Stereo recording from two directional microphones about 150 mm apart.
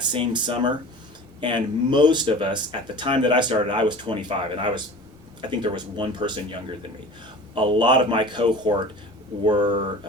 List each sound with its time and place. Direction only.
0.0 s speech: 30° right (ahead or behind)